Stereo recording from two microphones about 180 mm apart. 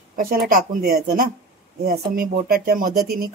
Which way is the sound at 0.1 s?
55° right (ahead or behind).